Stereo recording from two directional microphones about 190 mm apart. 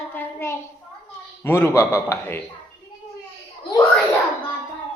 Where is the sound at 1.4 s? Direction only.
15° left (ahead or behind).